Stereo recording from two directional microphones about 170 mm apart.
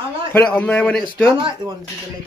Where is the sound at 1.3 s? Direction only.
25° right (ahead or behind).